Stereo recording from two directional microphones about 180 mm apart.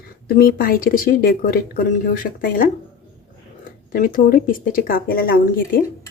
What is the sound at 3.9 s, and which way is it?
Speech, 50° left (ahead or behind).